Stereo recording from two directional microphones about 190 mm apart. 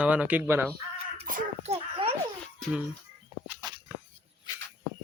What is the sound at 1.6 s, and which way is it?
Babbling, 30° right (ahead or behind).